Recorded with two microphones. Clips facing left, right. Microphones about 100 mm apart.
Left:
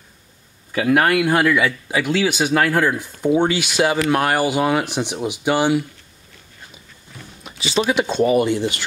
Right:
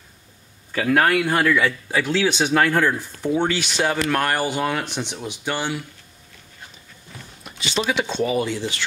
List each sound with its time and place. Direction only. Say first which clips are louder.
0.7 s speech: left 2 dB; 5° left (ahead or behind)
7.4 s speech: left 4 dB; 5° left (ahead or behind)
8.2 s speech: left 7 dB; 50° left (ahead or behind)